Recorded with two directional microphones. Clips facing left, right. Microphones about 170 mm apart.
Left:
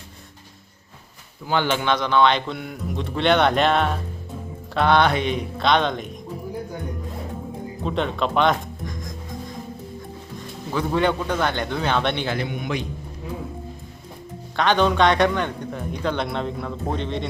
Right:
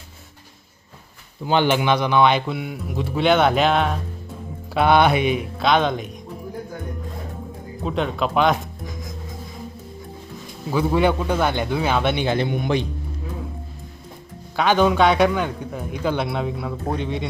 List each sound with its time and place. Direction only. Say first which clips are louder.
1.5 s a man's voice: right 3 dB; 15° right (ahead or behind)
7.9 s speech: right 1 dB; centre (ahead or behind)
10.7 s a man's voice: right 3 dB; 10° right (ahead or behind)
12.2 s a man's voice: right 5 dB; 20° right (ahead or behind)
12.5 s a man's voice: right 5 dB; 30° right (ahead or behind)
14.5 s a man's voice: right 2 dB; 5° right (ahead or behind)